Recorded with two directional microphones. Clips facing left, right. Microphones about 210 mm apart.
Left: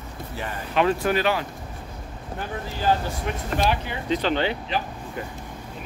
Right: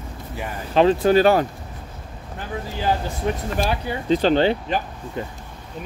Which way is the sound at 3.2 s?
35° right (ahead or behind).